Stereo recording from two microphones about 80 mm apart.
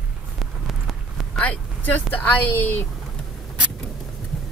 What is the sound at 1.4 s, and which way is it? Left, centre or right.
A woman's voice, centre.